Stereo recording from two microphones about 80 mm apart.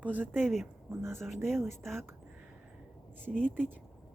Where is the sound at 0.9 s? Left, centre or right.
Right.